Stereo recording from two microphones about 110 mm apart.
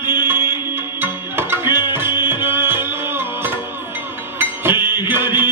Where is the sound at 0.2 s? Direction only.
20° right (ahead or behind).